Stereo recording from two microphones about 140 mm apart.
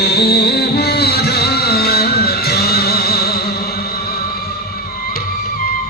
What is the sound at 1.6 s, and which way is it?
Music, 90° left.